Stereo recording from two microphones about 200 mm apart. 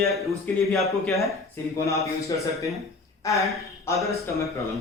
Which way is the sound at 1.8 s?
15° left (ahead or behind).